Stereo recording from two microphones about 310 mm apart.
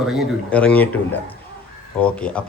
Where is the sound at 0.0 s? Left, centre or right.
Centre.